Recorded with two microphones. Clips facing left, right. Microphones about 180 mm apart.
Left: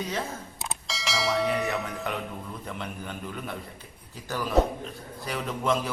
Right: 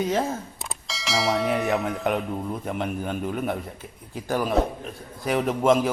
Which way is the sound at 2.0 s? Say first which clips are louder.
Right 8 dB; 50° right (ahead or behind).